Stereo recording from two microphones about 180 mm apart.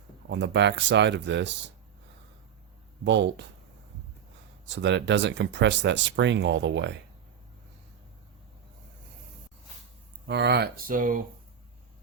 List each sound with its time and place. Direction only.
0.3 s speech: 85° right
3.0 s speech: 75° right (ahead or behind)
4.7 s speech: 80° right
10.2 s speech: 70° right (ahead or behind); by 11.2 s 50° right (ahead or behind)